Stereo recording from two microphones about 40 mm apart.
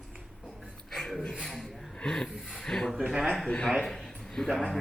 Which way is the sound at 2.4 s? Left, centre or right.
Centre.